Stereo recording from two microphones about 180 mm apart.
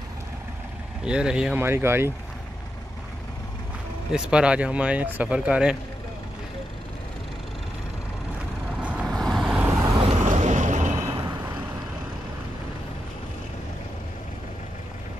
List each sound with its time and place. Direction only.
1.0 s speech: 5° right (ahead or behind)
4.1 s speech: 5° right (ahead or behind)
8.8 s vehicle: 5° right (ahead or behind)
9.9 s vehicle: 35° right (ahead or behind)